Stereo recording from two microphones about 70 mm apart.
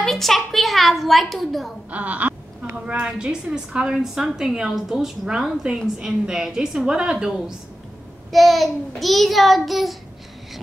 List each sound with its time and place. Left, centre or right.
0.0 s a woman's voice: centre
1.9 s a woman's voice: right
8.3 s child singing: centre